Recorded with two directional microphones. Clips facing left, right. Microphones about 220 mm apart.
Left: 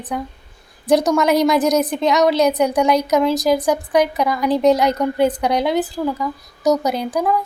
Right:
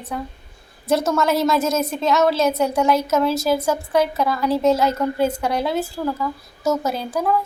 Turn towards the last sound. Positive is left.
turn(degrees=15)  # may be behind; listen again after turning